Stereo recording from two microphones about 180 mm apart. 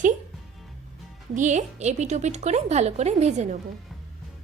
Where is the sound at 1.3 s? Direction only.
45° right (ahead or behind).